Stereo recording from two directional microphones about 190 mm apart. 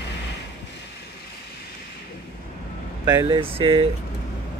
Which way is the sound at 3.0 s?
25° right (ahead or behind).